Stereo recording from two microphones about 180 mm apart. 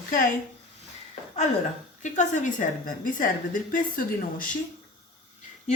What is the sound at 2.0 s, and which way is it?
A woman's voice, 45° left (ahead or behind).